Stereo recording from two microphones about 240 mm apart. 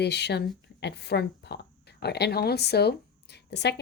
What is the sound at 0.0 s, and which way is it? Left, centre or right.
Speech, left.